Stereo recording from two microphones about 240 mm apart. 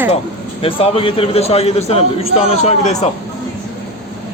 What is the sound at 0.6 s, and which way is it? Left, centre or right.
A man's voice, left.